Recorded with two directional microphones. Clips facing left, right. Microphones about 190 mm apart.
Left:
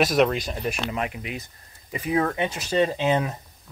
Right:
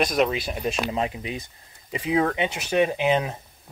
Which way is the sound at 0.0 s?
Centre (ahead or behind).